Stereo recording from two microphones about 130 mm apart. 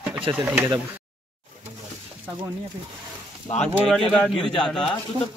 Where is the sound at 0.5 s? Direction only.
15° right (ahead or behind).